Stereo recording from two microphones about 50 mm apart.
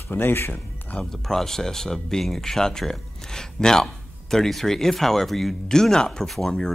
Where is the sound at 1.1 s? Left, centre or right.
Centre.